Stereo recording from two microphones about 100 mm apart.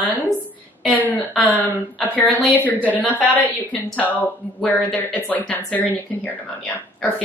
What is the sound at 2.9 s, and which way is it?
Speech, 15° left (ahead or behind).